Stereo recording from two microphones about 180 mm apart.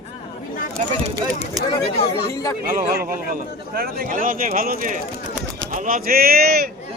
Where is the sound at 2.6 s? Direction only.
55° right (ahead or behind).